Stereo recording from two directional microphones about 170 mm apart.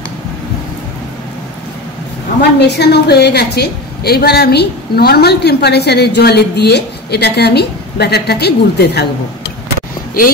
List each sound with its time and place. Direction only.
2.6 s a woman's voice: 75° left (ahead or behind)